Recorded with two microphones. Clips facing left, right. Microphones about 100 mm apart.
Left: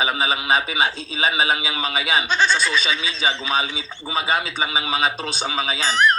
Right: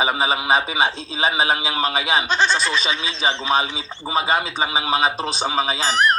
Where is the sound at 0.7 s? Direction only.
30° right (ahead or behind).